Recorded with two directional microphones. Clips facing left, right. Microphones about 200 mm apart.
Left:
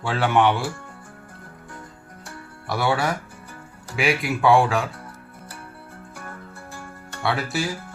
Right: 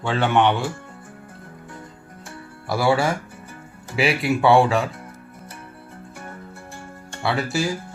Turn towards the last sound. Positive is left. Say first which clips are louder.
# right 2 dB
turn(degrees=0)  # may be behind; listen again after turning